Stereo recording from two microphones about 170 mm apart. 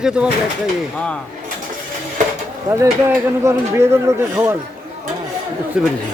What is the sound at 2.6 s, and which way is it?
Speech, 15° right (ahead or behind).